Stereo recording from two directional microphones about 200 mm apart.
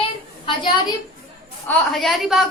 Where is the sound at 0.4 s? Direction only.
25° left (ahead or behind).